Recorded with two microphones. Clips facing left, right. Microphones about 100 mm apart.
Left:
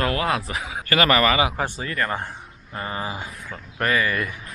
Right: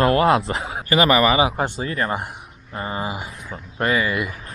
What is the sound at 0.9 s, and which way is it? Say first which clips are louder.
Speech: right 3 dB; 15° right (ahead or behind).